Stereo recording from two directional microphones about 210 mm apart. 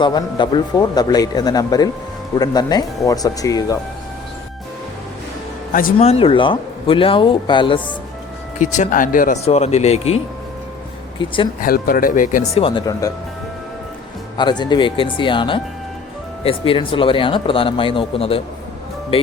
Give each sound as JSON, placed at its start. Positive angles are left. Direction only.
{"t": 0.0, "sound": "speech", "side_deg": 20}
{"t": 5.7, "sound": "speech", "side_deg": 35}
{"t": 8.5, "sound": "speech", "side_deg": 35}
{"t": 11.2, "sound": "speech", "side_deg": 25}
{"t": 11.6, "sound": "speech", "side_deg": 45}
{"t": 12.5, "sound": "speech", "side_deg": 25}
{"t": 14.3, "sound": "speech", "side_deg": 20}